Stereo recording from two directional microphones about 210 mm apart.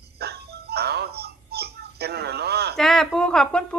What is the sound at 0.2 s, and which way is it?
Music, 50° right (ahead or behind).